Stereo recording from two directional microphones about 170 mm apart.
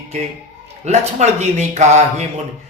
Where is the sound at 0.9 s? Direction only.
45° right (ahead or behind).